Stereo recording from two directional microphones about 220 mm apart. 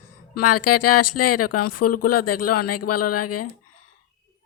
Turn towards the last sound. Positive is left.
turn(degrees=90)